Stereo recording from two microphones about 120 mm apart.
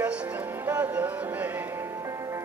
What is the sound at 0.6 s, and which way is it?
Music, 15° right (ahead or behind).